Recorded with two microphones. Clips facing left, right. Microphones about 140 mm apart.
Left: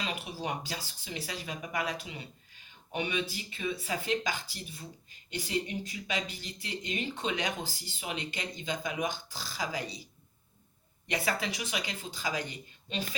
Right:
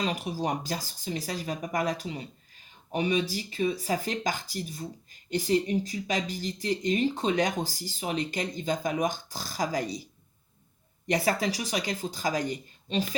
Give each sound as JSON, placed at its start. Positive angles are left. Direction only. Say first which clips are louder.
{"t": 0.0, "sound": "speech", "louder": "right 7 dB", "side_deg": -40}
{"t": 11.0, "sound": "speech", "louder": "right 6 dB", "side_deg": -40}